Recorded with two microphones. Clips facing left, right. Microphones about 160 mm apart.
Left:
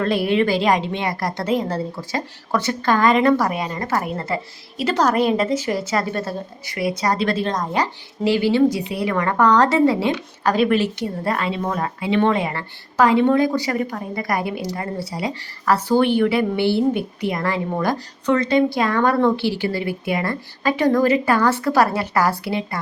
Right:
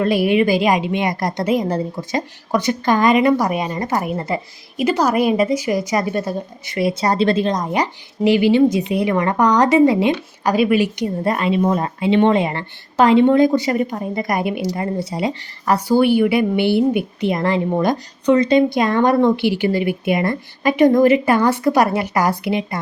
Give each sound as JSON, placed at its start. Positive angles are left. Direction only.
{"t": 0.0, "sound": "a woman's voice", "side_deg": -10}
{"t": 6.7, "sound": "a woman's voice", "side_deg": -25}